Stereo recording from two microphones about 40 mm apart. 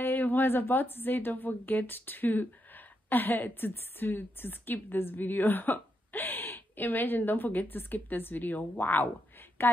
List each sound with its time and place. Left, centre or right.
0.0 s a woman's voice: left
9.6 s a woman's voice: left